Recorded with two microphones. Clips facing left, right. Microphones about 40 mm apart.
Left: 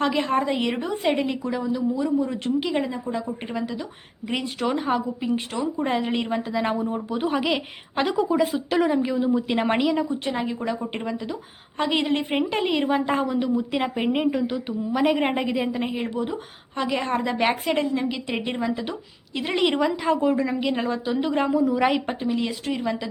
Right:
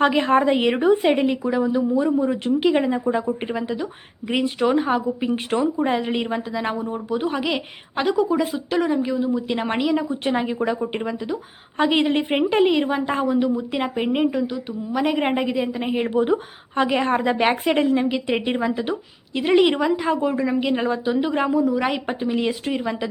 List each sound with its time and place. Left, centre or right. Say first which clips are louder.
0.0 s a woman's voice: right 5 dB; right
2.0 s speech: right 3 dB; right
2.2 s a woman's voice: right 5 dB; centre
3.0 s speech: right 6 dB; right
3.2 s a woman's voice: right 4 dB; centre
10.2 s a woman's voice: right 4 dB; centre
15.9 s a woman's voice: right 7 dB; right; by 22.3 s centre
22.3 s a woman's voice: right 3 dB; centre